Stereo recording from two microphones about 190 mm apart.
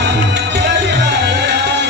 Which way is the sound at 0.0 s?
65° right (ahead or behind).